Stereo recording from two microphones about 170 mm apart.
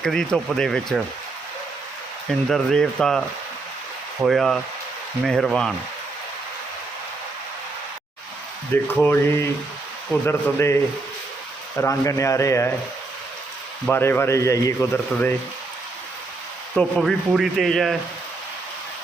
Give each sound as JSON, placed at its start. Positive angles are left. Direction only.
{"t": 0.0, "sound": "speech", "side_deg": 5}
{"t": 2.5, "sound": "speech", "side_deg": 0}
{"t": 8.7, "sound": "speech", "side_deg": 10}
{"t": 11.8, "sound": "speech", "side_deg": 15}
{"t": 13.8, "sound": "speech", "side_deg": 10}
{"t": 16.7, "sound": "speech", "side_deg": 0}